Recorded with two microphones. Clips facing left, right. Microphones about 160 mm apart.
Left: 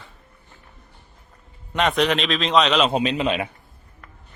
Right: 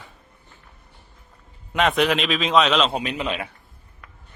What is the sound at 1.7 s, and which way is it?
A woman's voice, centre (ahead or behind).